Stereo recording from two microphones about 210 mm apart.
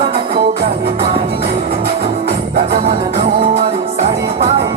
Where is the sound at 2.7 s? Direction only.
25° right (ahead or behind).